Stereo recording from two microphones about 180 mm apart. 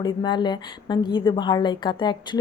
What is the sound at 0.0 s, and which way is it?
A woman's voice, 25° left (ahead or behind).